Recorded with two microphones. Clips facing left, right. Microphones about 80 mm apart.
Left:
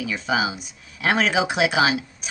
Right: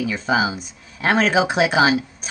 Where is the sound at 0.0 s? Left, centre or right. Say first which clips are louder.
Right 3 dB; right.